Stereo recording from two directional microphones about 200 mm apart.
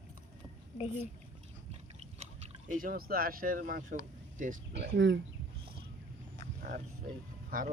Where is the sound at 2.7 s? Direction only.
45° right (ahead or behind).